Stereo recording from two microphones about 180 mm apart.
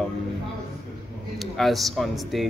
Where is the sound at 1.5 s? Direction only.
Centre (ahead or behind).